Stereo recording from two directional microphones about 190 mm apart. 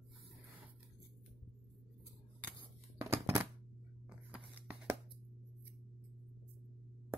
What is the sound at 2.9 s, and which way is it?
Scissors, 15° right (ahead or behind).